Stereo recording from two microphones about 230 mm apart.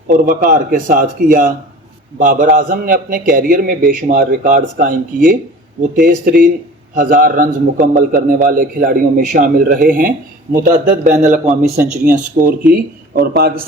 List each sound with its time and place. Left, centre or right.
0.1 s a man's voice: right